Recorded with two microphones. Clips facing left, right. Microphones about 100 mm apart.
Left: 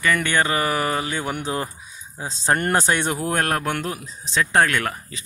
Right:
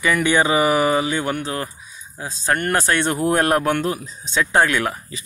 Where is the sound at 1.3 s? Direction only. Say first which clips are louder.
Right 1 dB; 15° left (ahead or behind).